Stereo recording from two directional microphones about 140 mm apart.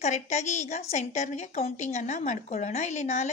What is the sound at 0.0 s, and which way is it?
A woman's voice, 55° left (ahead or behind).